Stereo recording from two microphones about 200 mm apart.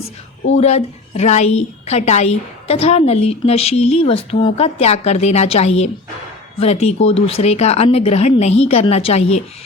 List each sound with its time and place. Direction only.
0.5 s a woman's voice: 35° left (ahead or behind)